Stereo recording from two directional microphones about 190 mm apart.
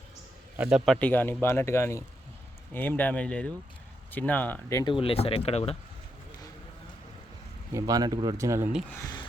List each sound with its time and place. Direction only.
0.6 s speech: 5° right (ahead or behind)
0.9 s speech: 10° left (ahead or behind); by 5.7 s 30° left (ahead or behind)
7.7 s speech: 20° right (ahead or behind)
8.9 s speech: 15° left (ahead or behind)